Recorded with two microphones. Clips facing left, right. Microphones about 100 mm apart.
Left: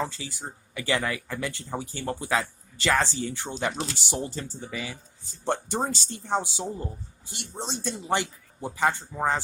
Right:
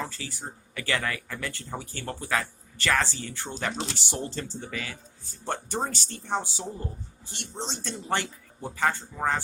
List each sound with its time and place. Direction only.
0.0 s speech: 20° left (ahead or behind)